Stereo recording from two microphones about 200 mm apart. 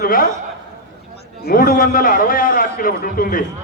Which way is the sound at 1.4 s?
45° left (ahead or behind).